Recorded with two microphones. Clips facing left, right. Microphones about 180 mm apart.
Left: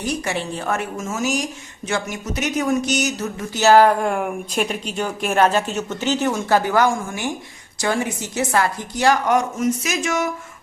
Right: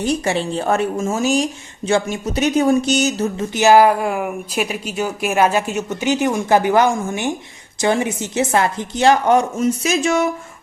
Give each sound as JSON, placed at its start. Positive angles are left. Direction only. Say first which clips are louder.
{"t": 0.0, "sound": "speech", "louder": "right 5 dB", "side_deg": -30}
{"t": 3.6, "sound": "a woman's voice", "louder": "right 1 dB", "side_deg": -10}